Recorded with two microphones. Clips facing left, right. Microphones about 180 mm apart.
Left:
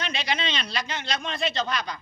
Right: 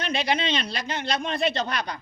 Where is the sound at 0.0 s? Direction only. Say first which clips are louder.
Right 4 dB; 55° right (ahead or behind).